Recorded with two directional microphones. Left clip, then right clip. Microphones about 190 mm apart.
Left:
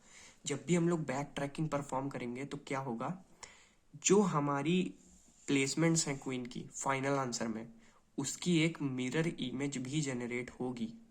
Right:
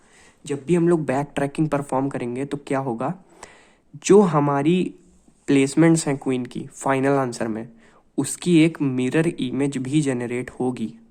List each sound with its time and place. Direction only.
0.4 s a woman's voice: 25° right (ahead or behind)